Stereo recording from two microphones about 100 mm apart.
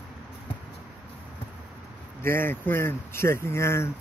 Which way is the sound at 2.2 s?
25° left (ahead or behind).